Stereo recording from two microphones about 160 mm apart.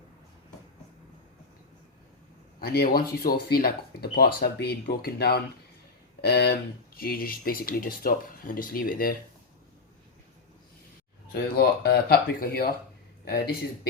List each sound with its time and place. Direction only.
2.6 s speech: 80° left
11.5 s speech: 85° left